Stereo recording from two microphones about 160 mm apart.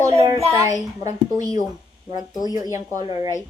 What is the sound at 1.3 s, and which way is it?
Speech, 20° right (ahead or behind).